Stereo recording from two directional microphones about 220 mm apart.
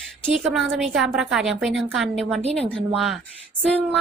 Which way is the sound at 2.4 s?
30° right (ahead or behind).